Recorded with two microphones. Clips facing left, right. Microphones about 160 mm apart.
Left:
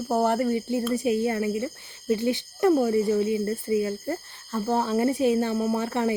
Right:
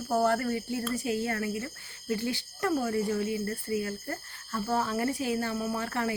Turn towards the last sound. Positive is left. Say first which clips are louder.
# left 6 dB
turn(degrees=20)  # may be behind; listen again after turning